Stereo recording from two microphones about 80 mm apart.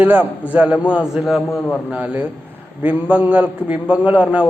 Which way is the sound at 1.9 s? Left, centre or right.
Centre.